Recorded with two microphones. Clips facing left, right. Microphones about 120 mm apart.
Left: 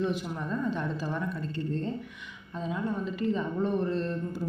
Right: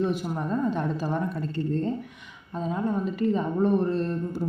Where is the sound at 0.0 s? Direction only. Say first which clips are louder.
Right 4 dB; 45° right (ahead or behind).